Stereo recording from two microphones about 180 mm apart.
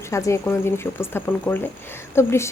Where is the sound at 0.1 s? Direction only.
15° left (ahead or behind).